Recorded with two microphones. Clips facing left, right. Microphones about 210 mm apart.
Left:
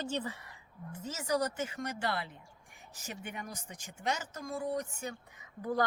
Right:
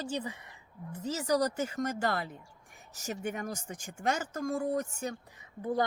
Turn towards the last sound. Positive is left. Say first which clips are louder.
# right 2 dB
turn(degrees=-20)  # may be behind; listen again after turning